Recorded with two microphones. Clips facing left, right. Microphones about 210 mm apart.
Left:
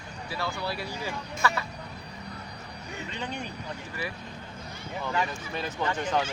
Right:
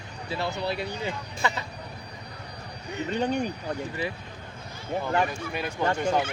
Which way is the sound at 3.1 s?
40° right (ahead or behind).